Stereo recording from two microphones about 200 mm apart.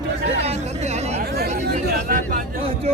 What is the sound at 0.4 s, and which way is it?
Chatter, 35° right (ahead or behind).